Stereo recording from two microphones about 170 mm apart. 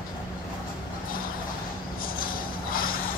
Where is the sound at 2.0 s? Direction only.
55° left (ahead or behind).